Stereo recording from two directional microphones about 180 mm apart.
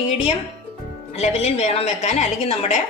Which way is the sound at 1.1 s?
35° left (ahead or behind).